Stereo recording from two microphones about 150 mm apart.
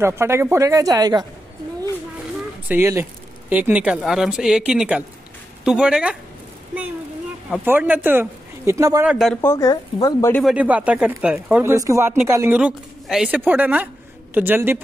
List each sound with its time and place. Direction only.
0.0 s speech: 15° right (ahead or behind)
2.7 s speech: 15° right (ahead or behind)
7.6 s speech: 10° right (ahead or behind)
9.0 s speech: 5° right (ahead or behind)
9.3 s speech: 15° left (ahead or behind)
9.7 s speech: 25° left (ahead or behind)
10.4 s speech: 10° right (ahead or behind)
11.7 s speech: 20° right (ahead or behind)
12.5 s speech: 5° right (ahead or behind)